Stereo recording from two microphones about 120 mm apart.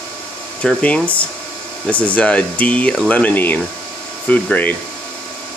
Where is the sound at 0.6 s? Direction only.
10° left (ahead or behind).